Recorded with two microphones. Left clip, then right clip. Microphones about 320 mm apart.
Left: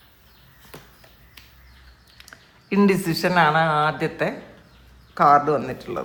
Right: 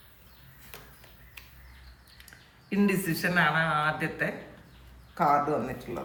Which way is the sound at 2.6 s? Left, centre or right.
Centre.